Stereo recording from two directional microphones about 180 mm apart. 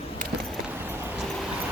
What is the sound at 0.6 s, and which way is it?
Clip-clop, 10° right (ahead or behind).